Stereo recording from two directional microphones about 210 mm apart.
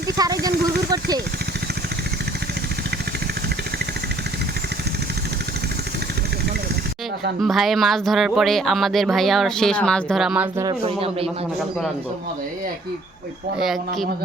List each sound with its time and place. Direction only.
0.2 s speech: 15° right (ahead or behind)
7.4 s speech: centre (ahead or behind)
10.7 s speech: 25° right (ahead or behind)
13.6 s speech: centre (ahead or behind)